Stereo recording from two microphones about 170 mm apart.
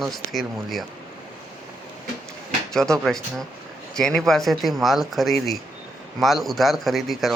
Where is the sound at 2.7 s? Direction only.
5° left (ahead or behind).